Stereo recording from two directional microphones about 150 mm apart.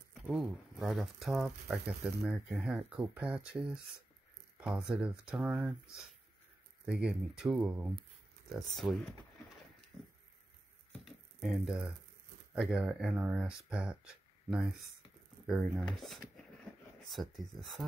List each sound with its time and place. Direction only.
0.1 s speech: centre (ahead or behind)
6.9 s speech: 5° right (ahead or behind)
11.4 s speech: 5° right (ahead or behind)